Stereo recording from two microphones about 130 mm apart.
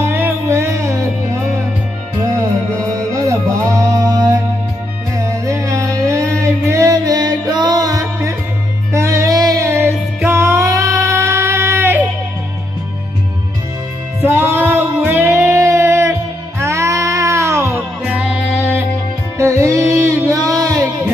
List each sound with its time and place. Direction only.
0.0 s music: 20° right (ahead or behind)
2.9 s music: 25° right (ahead or behind)
14.2 s music: 20° right (ahead or behind)
18.0 s music: 10° right (ahead or behind)
19.3 s music: 20° right (ahead or behind)